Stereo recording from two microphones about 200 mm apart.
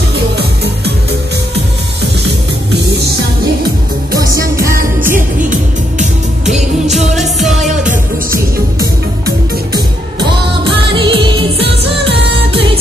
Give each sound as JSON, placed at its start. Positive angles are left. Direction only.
{"t": 4.6, "sound": "music", "side_deg": -15}
{"t": 5.9, "sound": "music", "side_deg": -35}
{"t": 7.2, "sound": "music", "side_deg": 0}
{"t": 8.3, "sound": "music", "side_deg": -15}